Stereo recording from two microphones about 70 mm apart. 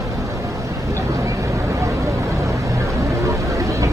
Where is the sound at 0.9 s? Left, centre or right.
Right.